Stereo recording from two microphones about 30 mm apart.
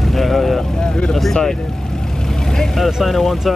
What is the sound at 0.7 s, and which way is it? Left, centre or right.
Vehicle, left.